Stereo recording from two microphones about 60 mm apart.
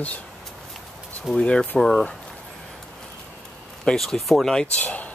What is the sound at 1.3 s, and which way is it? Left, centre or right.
Speech, centre.